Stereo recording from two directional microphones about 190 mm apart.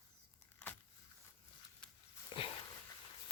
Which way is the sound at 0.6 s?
10° left (ahead or behind).